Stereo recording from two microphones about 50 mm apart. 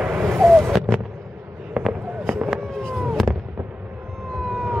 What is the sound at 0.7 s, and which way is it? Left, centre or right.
Artillery fire, centre.